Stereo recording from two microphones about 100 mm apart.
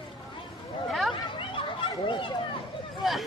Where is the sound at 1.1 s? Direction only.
60° left (ahead or behind).